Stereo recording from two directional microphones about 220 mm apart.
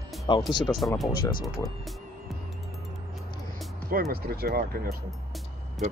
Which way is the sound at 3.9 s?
45° right (ahead or behind).